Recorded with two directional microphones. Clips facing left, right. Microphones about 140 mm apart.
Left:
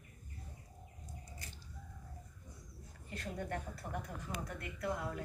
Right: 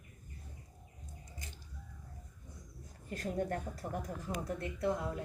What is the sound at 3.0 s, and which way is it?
A woman's voice, 40° right (ahead or behind).